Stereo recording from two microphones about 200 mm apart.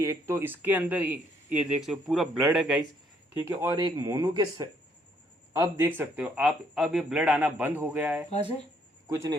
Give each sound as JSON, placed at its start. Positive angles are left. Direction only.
{"t": 0.0, "sound": "speech", "side_deg": -15}
{"t": 3.5, "sound": "speech", "side_deg": -15}
{"t": 8.3, "sound": "speech", "side_deg": 30}
{"t": 9.0, "sound": "speech", "side_deg": -15}